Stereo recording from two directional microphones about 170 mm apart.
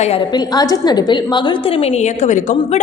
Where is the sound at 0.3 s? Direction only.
25° left (ahead or behind).